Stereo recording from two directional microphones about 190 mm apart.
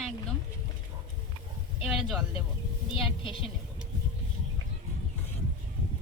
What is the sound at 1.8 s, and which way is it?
Speech, 5° right (ahead or behind).